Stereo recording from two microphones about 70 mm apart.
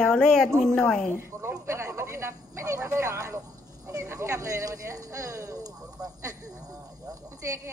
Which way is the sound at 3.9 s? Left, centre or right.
Right.